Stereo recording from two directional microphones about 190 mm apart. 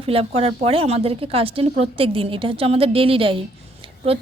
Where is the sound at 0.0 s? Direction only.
30° right (ahead or behind).